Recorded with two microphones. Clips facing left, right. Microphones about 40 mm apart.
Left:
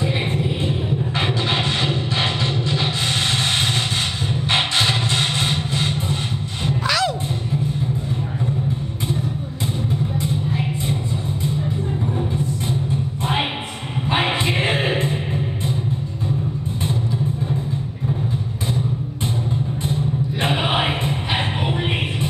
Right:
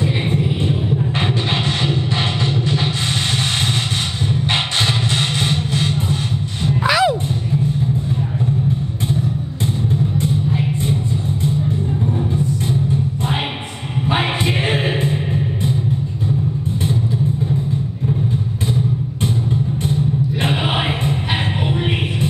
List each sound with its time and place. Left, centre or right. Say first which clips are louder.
4.7 s music: right 1 dB; centre
6.8 s music: right 6 dB; centre
14.0 s choir: right 1 dB; centre
20.4 s choir: left 2 dB; centre
21.6 s music: right 2 dB; centre